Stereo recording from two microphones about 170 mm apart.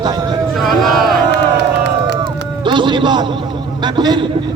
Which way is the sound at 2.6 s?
25° right (ahead or behind).